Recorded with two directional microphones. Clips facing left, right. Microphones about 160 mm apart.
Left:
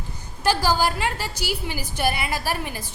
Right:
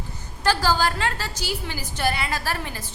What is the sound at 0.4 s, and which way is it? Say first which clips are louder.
A woman's voice: left 1 dB; 15° left (ahead or behind).